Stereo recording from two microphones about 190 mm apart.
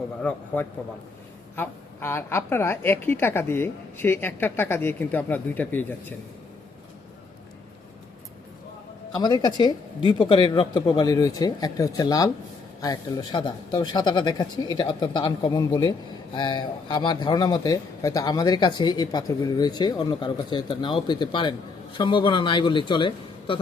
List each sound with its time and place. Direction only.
0.2 s a woman's voice: 10° left (ahead or behind)
9.1 s speech: 20° left (ahead or behind)